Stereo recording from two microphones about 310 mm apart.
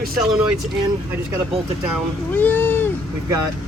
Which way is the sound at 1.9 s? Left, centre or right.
Centre.